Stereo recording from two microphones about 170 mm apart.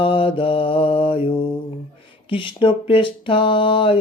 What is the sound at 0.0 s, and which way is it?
Mantra, 30° left (ahead or behind).